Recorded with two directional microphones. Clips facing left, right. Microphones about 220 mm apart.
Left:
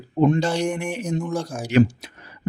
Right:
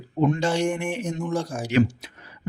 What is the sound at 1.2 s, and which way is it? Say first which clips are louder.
Speech: even; centre (ahead or behind).